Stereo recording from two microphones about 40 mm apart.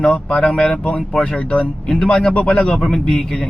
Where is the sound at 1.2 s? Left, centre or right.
Left.